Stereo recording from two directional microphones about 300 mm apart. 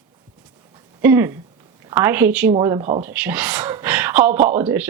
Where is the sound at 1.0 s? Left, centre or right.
Centre.